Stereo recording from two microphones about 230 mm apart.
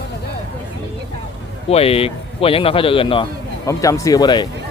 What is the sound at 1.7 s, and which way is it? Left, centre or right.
Speech, left.